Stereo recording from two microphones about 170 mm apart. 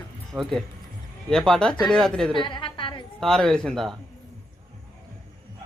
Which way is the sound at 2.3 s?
30° left (ahead or behind).